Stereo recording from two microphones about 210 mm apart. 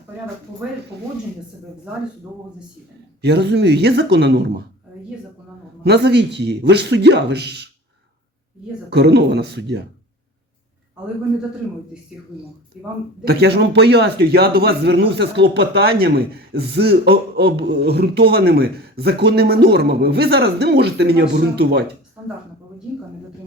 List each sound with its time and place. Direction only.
0.9 s a man's voice: 50° right (ahead or behind)
3.2 s a man's voice: 55° right (ahead or behind)
5.8 s a man's voice: 55° right (ahead or behind)
8.9 s a man's voice: 55° right (ahead or behind)
13.2 s a man's voice: 50° right (ahead or behind)